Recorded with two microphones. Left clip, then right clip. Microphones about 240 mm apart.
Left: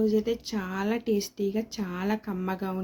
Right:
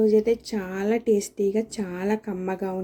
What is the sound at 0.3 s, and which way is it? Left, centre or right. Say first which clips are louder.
Speech: right 6 dB; centre.